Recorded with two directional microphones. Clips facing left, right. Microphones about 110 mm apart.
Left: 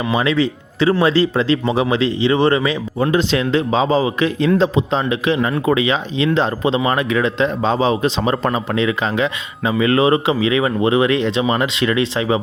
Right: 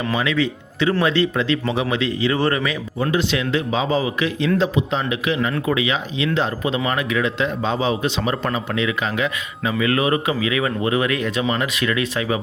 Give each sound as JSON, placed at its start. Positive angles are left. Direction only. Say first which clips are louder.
{"t": 0.1, "sound": "a man's voice", "louder": "left 5 dB", "side_deg": 30}
{"t": 3.0, "sound": "a man's voice", "louder": "left 4 dB", "side_deg": 40}